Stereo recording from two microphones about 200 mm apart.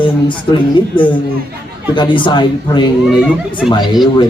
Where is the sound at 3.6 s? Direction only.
Centre (ahead or behind).